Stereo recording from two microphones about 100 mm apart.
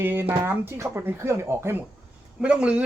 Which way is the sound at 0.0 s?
20° right (ahead or behind).